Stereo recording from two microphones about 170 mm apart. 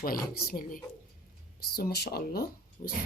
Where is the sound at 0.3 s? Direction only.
60° left (ahead or behind).